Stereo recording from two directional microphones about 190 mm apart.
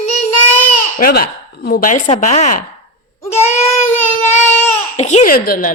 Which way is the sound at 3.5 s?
10° left (ahead or behind).